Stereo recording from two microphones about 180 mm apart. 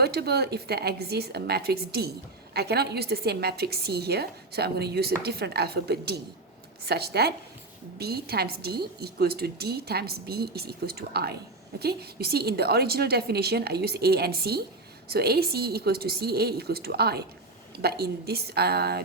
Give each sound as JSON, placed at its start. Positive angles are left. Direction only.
{"t": 0.0, "sound": "a woman's voice", "side_deg": -65}